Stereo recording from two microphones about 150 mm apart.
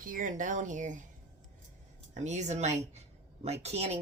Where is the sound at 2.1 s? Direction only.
50° right (ahead or behind).